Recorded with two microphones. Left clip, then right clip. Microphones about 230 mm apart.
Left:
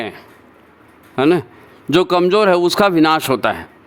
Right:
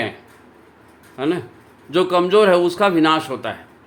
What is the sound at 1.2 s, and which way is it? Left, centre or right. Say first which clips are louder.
A man's voice: left 8 dB; left.